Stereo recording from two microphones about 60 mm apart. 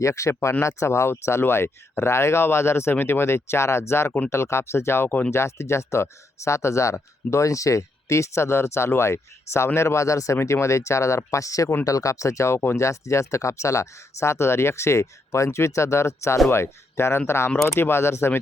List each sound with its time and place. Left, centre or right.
0.0 s speech: left
12.5 s speech: left
12.8 s speech: left